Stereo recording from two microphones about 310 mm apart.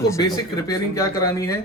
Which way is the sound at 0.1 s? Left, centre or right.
Centre.